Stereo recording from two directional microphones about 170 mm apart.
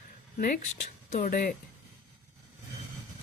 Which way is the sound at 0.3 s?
50° left (ahead or behind).